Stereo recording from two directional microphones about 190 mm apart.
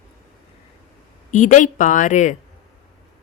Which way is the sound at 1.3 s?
40° left (ahead or behind).